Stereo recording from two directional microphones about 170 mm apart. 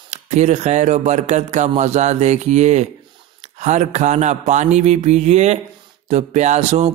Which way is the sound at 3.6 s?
40° right (ahead or behind).